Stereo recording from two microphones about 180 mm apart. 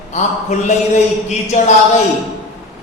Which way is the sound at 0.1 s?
40° left (ahead or behind).